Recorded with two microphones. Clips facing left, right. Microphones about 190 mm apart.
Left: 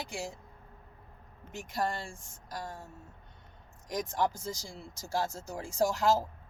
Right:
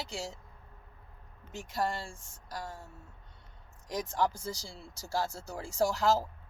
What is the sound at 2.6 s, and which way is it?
Speech, 15° left (ahead or behind).